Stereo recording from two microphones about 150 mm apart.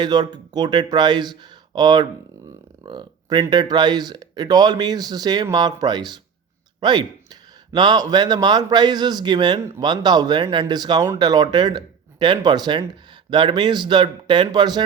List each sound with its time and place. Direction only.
0.0 s speech: 30° right (ahead or behind)
9.6 s speech: 20° right (ahead or behind)
9.9 s speech: 30° right (ahead or behind)